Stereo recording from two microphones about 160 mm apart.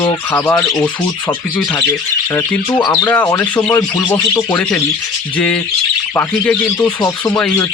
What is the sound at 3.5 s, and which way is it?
Speech, 10° left (ahead or behind).